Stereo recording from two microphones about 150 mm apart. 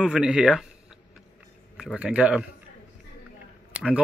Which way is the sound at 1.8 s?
5° right (ahead or behind).